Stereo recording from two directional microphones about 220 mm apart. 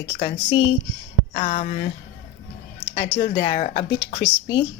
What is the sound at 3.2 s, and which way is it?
Speech, 20° left (ahead or behind).